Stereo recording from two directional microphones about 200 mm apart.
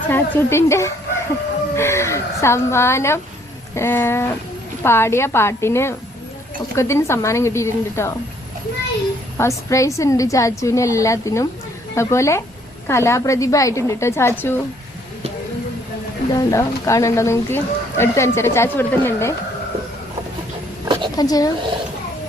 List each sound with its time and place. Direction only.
0.1 s speech: 10° left (ahead or behind)
9.4 s speech: 15° left (ahead or behind)
16.3 s speech: 15° left (ahead or behind)
20.8 s a sound: 25° right (ahead or behind)
21.2 s speech: 20° left (ahead or behind)